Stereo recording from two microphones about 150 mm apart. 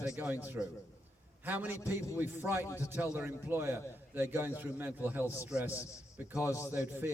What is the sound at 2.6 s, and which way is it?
Speech, 20° left (ahead or behind).